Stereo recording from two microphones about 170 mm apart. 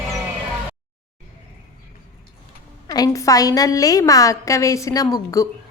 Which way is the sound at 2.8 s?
20° left (ahead or behind).